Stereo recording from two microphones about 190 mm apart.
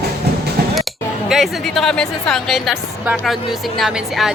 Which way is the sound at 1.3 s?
Centre (ahead or behind).